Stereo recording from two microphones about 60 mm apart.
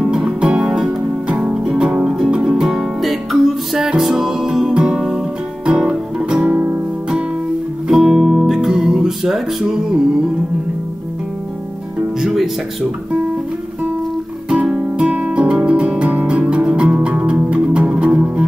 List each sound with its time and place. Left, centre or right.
0.0 s music: centre
6.4 s music: right
8.0 s music: centre
12.2 s music: centre
14.5 s music: centre